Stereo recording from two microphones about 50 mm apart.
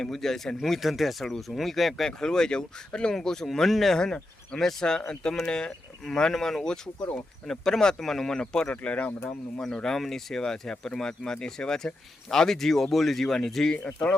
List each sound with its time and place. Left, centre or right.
0.0 s speech: centre
4.0 s speech: centre
8.6 s speech: left
9.6 s speech: centre
13.7 s speech: left